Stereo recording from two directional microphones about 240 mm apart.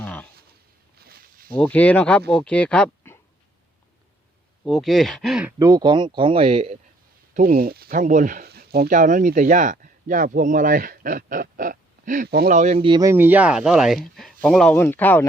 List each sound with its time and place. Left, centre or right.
0.0 s a sound: centre
0.9 s a sound: right
1.5 s speech: centre
4.6 s speech: centre; by 6.7 s right
7.3 s speech: right
12.5 s speech: right; by 15.3 s centre